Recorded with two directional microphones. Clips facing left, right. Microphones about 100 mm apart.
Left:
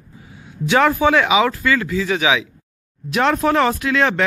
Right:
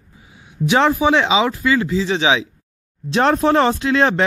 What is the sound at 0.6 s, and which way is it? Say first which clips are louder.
Speech: even; 20° right (ahead or behind).